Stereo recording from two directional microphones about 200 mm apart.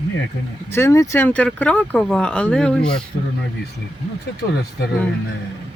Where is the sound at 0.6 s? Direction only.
10° left (ahead or behind).